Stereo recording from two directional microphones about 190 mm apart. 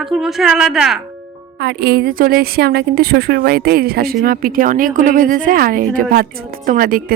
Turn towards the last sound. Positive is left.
turn(degrees=-45)  # may be behind; listen again after turning